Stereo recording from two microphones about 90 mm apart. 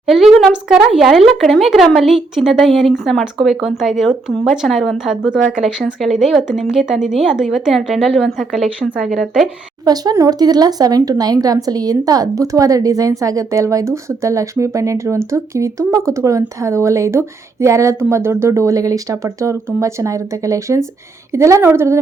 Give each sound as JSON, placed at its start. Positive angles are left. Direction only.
{"t": 0.0, "sound": "speech", "side_deg": -5}
{"t": 9.8, "sound": "a woman's voice", "side_deg": -45}